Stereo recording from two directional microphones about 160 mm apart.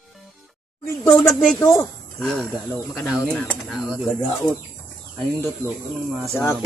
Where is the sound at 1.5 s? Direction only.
20° left (ahead or behind).